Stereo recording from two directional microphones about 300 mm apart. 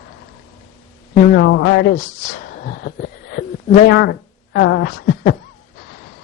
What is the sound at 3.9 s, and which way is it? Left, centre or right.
Speech, left.